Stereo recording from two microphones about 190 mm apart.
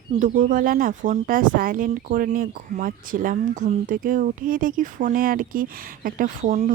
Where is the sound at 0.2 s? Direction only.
40° right (ahead or behind).